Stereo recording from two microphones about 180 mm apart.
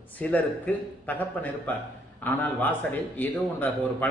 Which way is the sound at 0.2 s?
10° left (ahead or behind).